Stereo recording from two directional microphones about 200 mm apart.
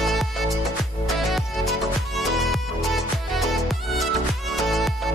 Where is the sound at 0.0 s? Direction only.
Centre (ahead or behind).